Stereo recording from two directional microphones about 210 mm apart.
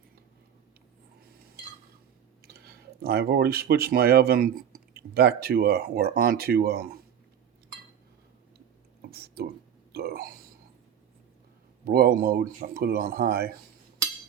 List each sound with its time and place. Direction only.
2.4 s speech: 50° right (ahead or behind)
9.0 s whispering: 50° right (ahead or behind)
9.9 s a sound: 45° right (ahead or behind)
11.9 s speech: 45° right (ahead or behind)